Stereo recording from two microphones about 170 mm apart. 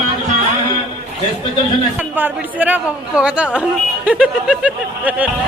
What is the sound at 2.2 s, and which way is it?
Speech, 10° right (ahead or behind).